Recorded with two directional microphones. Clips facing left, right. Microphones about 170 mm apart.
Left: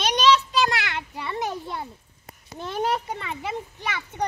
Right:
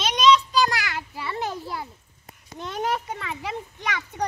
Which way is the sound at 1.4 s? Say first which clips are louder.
Left 1 dB; 20° left (ahead or behind).